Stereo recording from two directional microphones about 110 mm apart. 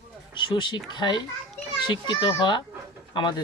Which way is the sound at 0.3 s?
45° left (ahead or behind).